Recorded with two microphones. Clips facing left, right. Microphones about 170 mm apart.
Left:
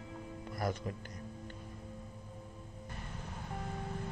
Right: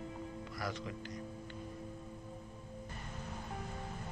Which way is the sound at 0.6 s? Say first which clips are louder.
Left 5 dB; 50° left (ahead or behind).